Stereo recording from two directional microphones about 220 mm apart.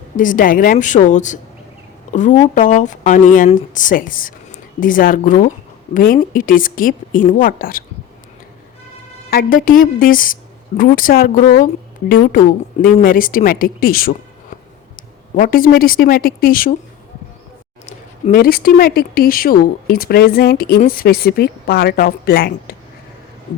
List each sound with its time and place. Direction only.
0.2 s speech: 40° left (ahead or behind)
9.3 s speech: 40° left (ahead or behind)
17.8 s speech: 40° left (ahead or behind)